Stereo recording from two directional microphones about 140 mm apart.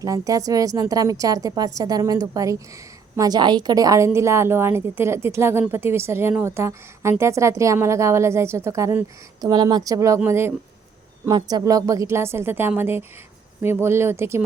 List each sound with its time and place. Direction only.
0.0 s a woman's voice: 25° right (ahead or behind)
9.5 s a woman's voice: 30° right (ahead or behind)
11.3 s a woman's voice: 30° right (ahead or behind)